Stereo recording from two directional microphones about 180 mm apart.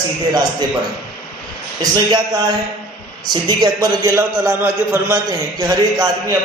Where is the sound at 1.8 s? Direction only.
20° right (ahead or behind).